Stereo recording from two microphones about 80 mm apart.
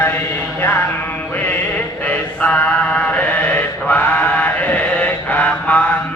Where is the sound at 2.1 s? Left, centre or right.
Centre.